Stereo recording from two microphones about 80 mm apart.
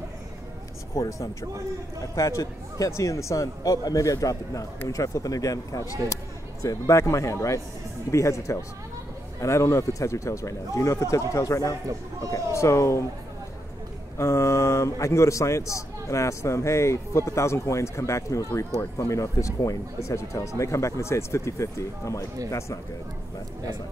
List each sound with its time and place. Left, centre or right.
0.9 s a man's voice: left
14.1 s a man's voice: left